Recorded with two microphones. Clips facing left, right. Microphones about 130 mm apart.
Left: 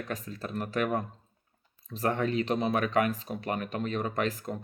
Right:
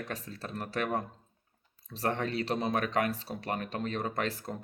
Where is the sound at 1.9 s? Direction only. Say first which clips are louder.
Left 3 dB; 35° right (ahead or behind).